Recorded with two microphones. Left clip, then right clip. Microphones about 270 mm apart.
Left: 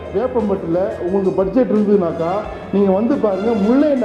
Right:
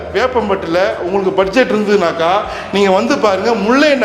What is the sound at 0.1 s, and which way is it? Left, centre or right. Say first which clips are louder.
Speech: right 4 dB; right.